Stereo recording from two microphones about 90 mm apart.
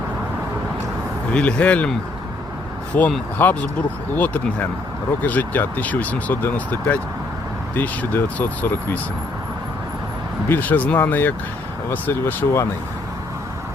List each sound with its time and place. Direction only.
1.3 s speech: 10° left (ahead or behind)
2.9 s speech: 20° left (ahead or behind)
5.2 s speech: 20° left (ahead or behind)
10.5 s speech: 20° left (ahead or behind)